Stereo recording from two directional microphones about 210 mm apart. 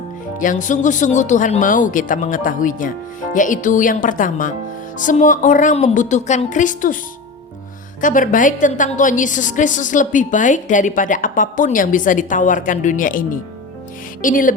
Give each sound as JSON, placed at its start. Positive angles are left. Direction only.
{"t": 0.3, "sound": "a woman's voice", "side_deg": 40}
{"t": 8.0, "sound": "a woman's voice", "side_deg": 40}